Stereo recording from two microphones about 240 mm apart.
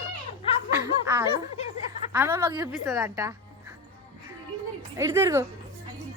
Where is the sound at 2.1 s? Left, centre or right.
Centre.